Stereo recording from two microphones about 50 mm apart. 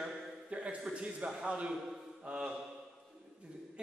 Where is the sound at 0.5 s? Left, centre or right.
Right.